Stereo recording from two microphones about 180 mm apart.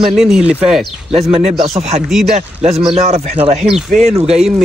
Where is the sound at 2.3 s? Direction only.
40° right (ahead or behind).